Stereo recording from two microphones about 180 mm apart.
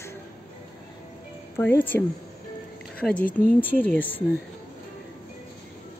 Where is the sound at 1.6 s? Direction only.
10° left (ahead or behind).